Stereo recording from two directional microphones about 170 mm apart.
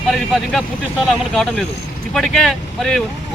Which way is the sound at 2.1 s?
Centre (ahead or behind).